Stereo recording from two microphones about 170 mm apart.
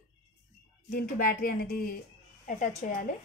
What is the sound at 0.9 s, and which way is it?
Speech, 60° left (ahead or behind).